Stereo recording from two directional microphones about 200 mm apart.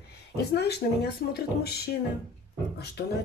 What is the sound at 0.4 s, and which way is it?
Speech, 55° left (ahead or behind).